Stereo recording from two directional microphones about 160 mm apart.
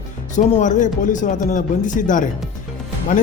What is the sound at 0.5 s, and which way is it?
Speech, 50° left (ahead or behind).